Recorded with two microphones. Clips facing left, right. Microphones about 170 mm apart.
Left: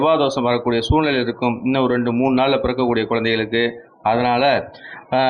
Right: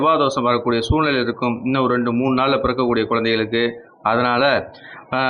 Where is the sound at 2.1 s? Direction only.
25° left (ahead or behind).